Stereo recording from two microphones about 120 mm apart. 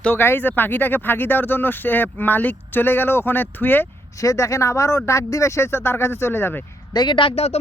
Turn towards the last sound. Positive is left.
turn(degrees=60)  # may be behind; listen again after turning